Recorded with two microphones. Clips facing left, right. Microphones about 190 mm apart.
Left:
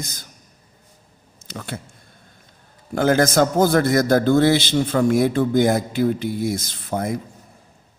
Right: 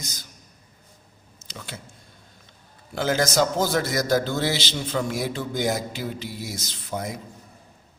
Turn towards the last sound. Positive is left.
turn(degrees=55)  # may be behind; listen again after turning